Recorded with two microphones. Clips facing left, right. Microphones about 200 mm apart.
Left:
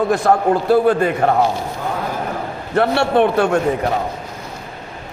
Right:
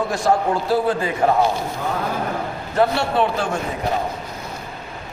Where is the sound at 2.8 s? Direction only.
60° left (ahead or behind).